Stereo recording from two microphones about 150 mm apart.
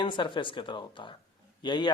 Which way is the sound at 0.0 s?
30° left (ahead or behind).